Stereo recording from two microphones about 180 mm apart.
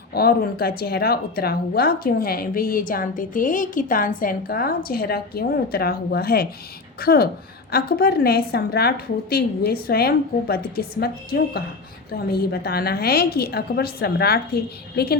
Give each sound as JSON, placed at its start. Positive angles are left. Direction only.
{"t": 0.1, "sound": "speech", "side_deg": 60}